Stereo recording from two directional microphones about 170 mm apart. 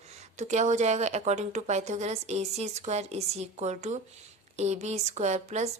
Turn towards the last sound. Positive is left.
turn(degrees=-40)  # may be behind; listen again after turning